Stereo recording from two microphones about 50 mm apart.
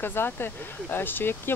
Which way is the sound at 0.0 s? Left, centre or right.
Left.